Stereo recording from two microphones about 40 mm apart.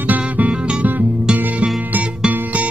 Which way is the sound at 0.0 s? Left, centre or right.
Right.